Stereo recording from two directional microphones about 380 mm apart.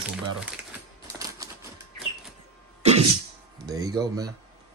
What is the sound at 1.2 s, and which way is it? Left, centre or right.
Typewriter, centre.